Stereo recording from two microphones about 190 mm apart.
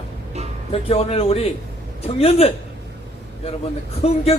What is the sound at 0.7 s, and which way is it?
Music, 30° left (ahead or behind).